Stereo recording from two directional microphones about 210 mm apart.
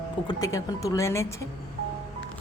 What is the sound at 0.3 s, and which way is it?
A woman's voice, 15° left (ahead or behind).